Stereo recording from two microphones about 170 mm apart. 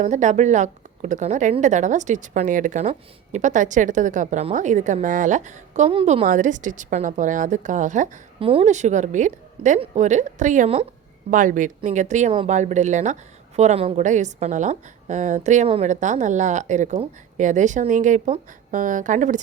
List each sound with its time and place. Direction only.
0.0 s a woman's voice: 45° right (ahead or behind)
6.2 s a woman's voice: 50° right (ahead or behind)
8.4 s a woman's voice: 35° right (ahead or behind)